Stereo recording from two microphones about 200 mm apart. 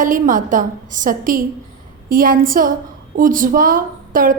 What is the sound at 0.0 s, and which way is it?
A woman's voice, 40° right (ahead or behind).